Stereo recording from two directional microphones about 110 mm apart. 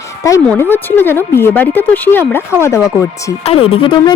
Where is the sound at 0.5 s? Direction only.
20° left (ahead or behind).